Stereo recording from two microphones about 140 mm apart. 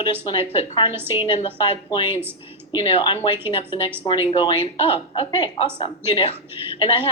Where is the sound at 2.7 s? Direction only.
40° left (ahead or behind).